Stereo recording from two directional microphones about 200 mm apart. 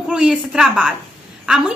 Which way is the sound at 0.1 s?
5° right (ahead or behind).